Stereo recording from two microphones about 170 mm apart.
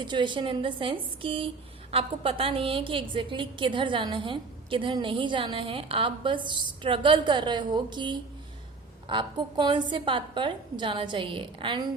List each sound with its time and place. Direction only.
0.0 s a woman's voice: 25° right (ahead or behind)